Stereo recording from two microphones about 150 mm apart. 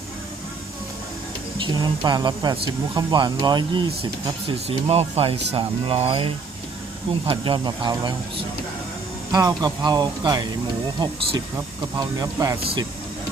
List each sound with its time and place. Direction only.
1.5 s speech: 30° right (ahead or behind)
11.5 s speech: 20° right (ahead or behind)